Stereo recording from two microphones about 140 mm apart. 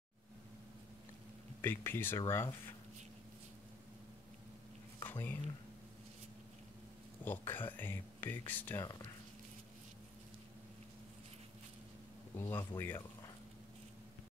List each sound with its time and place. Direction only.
1.6 s speech: 15° left (ahead or behind)
5.0 s speech: 15° left (ahead or behind)
7.2 s speech: 15° left (ahead or behind)
12.4 s speech: 15° left (ahead or behind)